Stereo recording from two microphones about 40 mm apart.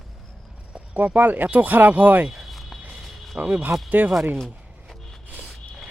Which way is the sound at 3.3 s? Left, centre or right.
Right.